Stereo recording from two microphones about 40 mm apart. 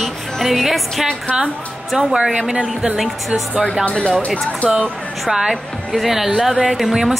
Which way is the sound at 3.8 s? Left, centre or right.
Left.